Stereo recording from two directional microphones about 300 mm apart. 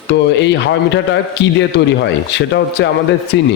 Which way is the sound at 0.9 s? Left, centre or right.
Left.